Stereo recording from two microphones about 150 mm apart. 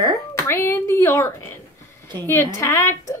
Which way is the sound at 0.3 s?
15° left (ahead or behind).